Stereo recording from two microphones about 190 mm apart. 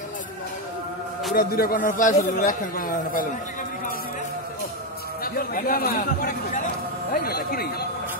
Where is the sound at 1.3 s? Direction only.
50° left (ahead or behind).